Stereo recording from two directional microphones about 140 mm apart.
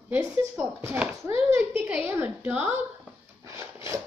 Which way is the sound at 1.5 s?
15° right (ahead or behind).